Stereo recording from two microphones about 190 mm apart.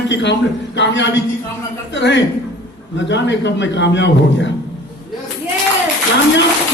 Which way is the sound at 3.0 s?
70° left (ahead or behind).